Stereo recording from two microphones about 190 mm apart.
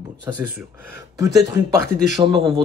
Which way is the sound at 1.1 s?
20° right (ahead or behind).